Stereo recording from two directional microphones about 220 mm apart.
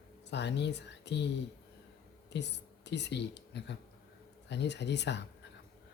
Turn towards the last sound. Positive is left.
turn(degrees=50)  # may be behind; listen again after turning